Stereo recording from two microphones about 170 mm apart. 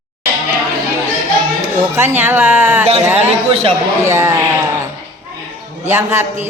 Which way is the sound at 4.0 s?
15° right (ahead or behind).